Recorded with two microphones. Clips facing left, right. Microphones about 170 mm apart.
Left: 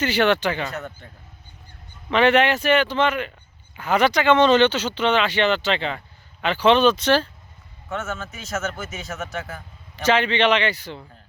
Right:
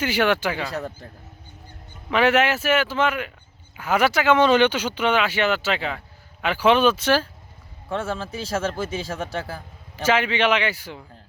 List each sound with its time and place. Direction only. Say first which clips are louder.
0.0 s speech: left 2 dB; 10° right (ahead or behind)
0.7 s speech: right 3 dB; 35° right (ahead or behind)
2.0 s speech: left 2 dB; 5° right (ahead or behind)
7.9 s speech: right 3 dB; 30° right (ahead or behind)
9.9 s speech: left 1 dB; 10° right (ahead or behind)